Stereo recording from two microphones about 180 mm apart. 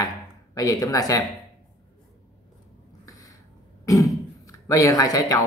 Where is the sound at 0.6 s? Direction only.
20° left (ahead or behind).